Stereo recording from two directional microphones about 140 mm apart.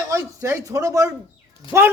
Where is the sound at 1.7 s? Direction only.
35° left (ahead or behind).